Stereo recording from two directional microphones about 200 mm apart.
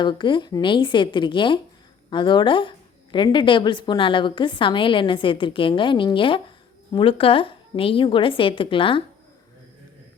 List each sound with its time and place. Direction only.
0.0 s a woman's voice: 25° left (ahead or behind)